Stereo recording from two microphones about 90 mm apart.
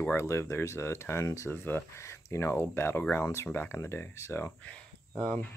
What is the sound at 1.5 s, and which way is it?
Speech, 25° left (ahead or behind).